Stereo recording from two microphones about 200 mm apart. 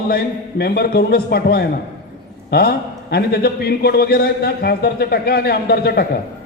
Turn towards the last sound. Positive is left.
turn(degrees=50)  # may be behind; listen again after turning